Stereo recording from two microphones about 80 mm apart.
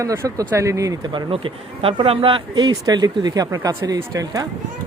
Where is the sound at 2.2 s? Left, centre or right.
Right.